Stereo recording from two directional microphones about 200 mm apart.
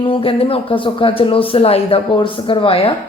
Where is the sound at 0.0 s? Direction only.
25° left (ahead or behind).